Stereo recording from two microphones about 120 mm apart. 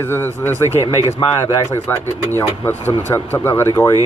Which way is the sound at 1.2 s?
35° left (ahead or behind).